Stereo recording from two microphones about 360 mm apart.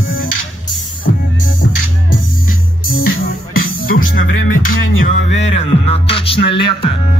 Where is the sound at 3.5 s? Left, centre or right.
Left.